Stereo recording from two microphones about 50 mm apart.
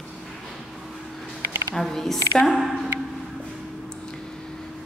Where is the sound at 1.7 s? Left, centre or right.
Centre.